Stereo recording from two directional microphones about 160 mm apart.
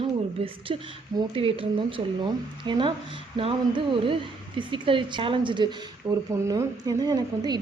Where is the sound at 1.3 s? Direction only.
35° right (ahead or behind).